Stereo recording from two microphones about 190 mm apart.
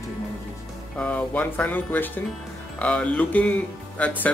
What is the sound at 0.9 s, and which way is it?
Speech, 5° left (ahead or behind).